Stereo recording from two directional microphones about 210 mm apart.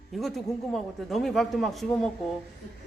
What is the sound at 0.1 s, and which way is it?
A man's voice, centre (ahead or behind).